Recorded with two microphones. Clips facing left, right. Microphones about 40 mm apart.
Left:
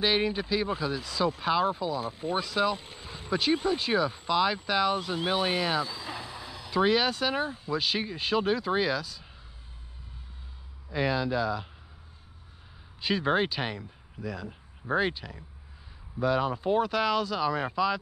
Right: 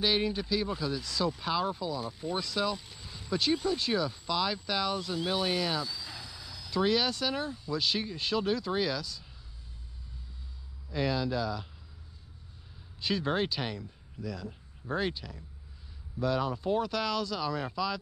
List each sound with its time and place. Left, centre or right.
0.0 s speech: left
10.9 s speech: left
13.0 s speech: left